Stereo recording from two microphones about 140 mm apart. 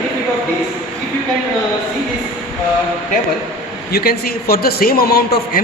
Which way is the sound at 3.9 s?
90° left.